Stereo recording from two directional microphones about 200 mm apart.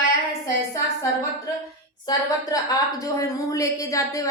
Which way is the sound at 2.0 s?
20° left (ahead or behind).